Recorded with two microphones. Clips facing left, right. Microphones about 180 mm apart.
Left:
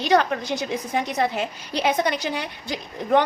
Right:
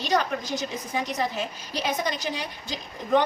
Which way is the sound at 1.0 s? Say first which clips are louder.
Left 4 dB; 65° left (ahead or behind).